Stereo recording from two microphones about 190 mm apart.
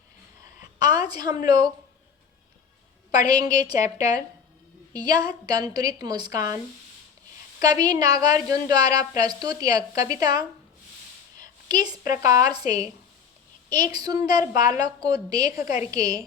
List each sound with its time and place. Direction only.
0.8 s a sound: 20° right (ahead or behind)
1.5 s a woman's voice: 20° right (ahead or behind)
3.1 s a woman's voice: 20° right (ahead or behind)
7.6 s a woman's voice: 20° right (ahead or behind)
12.2 s a woman's voice: 20° right (ahead or behind)